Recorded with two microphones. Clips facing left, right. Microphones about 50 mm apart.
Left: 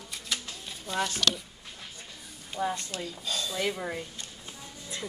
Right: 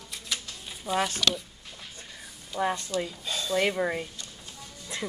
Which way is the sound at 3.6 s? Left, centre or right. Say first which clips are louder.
Right 7 dB; right.